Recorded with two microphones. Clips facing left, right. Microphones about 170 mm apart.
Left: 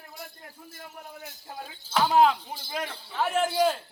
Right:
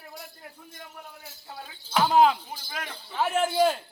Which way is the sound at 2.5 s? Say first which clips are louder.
Left 4 dB; 25° left (ahead or behind).